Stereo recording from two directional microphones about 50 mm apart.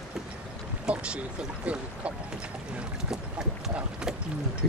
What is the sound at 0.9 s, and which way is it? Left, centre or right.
Speech, centre.